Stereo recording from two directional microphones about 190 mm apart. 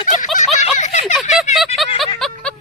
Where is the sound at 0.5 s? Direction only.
35° left (ahead or behind).